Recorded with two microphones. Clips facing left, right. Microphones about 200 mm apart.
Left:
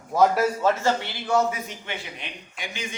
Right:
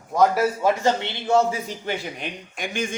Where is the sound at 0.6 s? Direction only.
15° right (ahead or behind).